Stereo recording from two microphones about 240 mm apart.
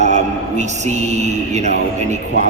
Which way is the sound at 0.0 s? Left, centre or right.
Right.